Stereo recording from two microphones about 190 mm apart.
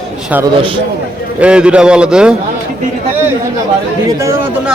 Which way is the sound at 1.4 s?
5° right (ahead or behind).